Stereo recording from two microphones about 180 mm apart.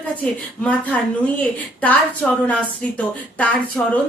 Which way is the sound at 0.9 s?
5° left (ahead or behind).